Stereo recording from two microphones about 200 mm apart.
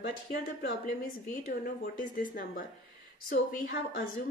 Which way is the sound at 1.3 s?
45° left (ahead or behind).